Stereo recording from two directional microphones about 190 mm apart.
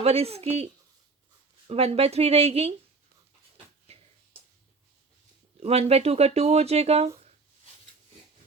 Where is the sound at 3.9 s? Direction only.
30° right (ahead or behind).